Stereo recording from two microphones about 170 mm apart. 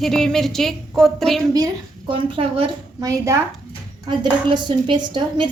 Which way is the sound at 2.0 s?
30° right (ahead or behind).